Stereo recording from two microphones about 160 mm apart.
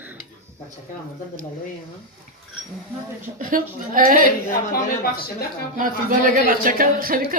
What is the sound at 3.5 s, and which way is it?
Speech, 60° right (ahead or behind).